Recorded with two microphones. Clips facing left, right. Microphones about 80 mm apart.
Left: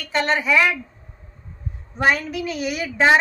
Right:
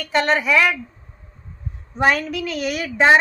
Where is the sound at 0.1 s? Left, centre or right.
Centre.